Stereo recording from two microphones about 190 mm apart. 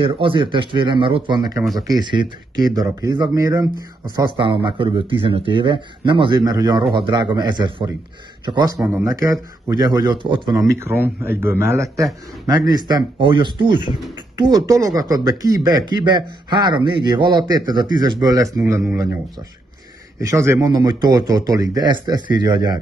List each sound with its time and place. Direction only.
0.0 s speech: 25° right (ahead or behind)
20.2 s speech: 15° right (ahead or behind)